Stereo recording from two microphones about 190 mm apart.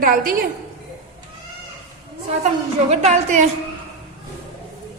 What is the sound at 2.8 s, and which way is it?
Speech, 35° right (ahead or behind).